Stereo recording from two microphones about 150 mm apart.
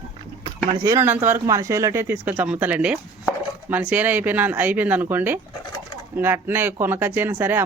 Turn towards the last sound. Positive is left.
turn(degrees=-10)  # may be behind; listen again after turning